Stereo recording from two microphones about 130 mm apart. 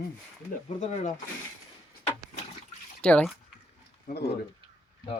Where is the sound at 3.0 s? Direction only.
10° left (ahead or behind).